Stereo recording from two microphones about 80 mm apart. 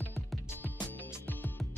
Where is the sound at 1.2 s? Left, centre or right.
Left.